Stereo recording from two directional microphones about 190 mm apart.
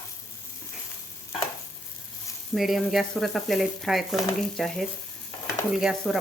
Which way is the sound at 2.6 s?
Centre (ahead or behind).